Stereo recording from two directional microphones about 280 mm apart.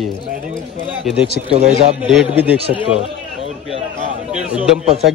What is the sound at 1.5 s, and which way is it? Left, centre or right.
Speech, right.